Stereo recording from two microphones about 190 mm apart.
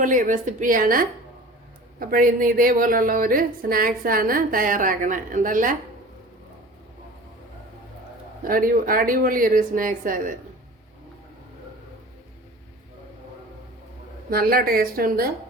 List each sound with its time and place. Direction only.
0.0 s a woman's voice: 45° right (ahead or behind)
8.4 s a woman's voice: 50° right (ahead or behind)
14.3 s a woman's voice: 50° right (ahead or behind)